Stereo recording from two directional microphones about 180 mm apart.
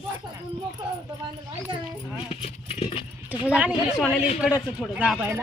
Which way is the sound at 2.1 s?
35° left (ahead or behind).